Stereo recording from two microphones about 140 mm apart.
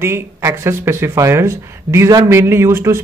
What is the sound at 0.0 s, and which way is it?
Speech, 20° right (ahead or behind).